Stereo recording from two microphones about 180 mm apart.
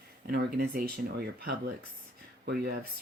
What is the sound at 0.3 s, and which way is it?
Speech, 60° right (ahead or behind).